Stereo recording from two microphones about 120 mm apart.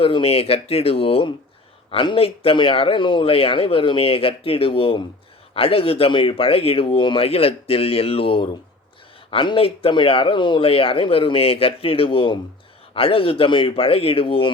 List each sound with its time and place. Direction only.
0.0 s speech: 50° left (ahead or behind)